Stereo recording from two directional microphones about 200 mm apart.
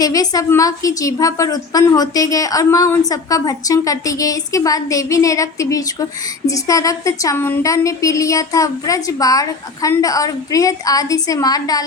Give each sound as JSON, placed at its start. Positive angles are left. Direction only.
{"t": 0.0, "sound": "a woman's voice", "side_deg": 20}